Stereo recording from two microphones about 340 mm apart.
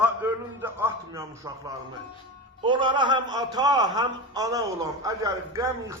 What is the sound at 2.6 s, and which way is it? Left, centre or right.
A man's voice, centre.